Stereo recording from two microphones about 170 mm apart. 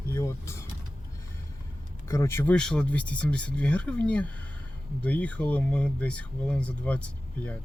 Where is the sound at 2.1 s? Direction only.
15° left (ahead or behind).